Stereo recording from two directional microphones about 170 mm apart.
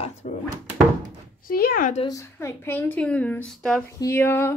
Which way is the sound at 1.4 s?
60° left (ahead or behind).